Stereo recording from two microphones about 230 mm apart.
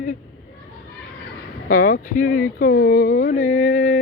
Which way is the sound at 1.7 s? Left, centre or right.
Left.